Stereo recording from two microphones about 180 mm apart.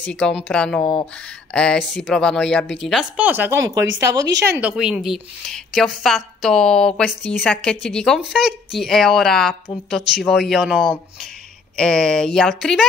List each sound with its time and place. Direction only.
0.1 s a woman's voice: centre (ahead or behind)